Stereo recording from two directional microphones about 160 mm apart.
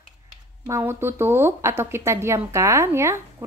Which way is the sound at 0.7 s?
15° right (ahead or behind).